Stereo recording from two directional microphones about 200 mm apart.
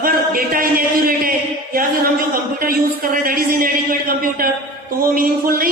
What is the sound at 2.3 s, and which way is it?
Speech, 45° right (ahead or behind).